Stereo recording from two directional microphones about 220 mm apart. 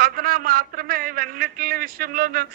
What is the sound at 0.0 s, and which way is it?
A woman's voice, 40° right (ahead or behind).